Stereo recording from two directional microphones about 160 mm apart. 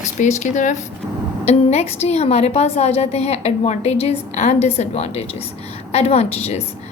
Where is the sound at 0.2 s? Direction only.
50° left (ahead or behind).